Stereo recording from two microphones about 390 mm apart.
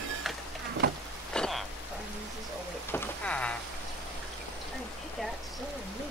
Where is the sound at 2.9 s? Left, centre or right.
Centre.